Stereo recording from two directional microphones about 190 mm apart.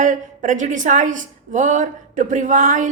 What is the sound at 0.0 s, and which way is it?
Speech, 40° right (ahead or behind).